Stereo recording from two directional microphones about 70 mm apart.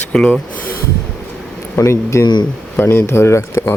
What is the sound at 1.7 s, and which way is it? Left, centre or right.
A man's voice, left.